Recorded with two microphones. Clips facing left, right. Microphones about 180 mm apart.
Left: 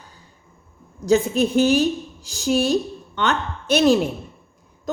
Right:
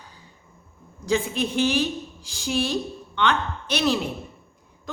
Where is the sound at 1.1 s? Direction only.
45° left (ahead or behind).